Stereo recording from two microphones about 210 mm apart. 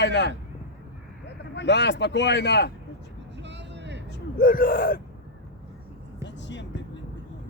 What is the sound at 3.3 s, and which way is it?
Vehicle, 55° right (ahead or behind).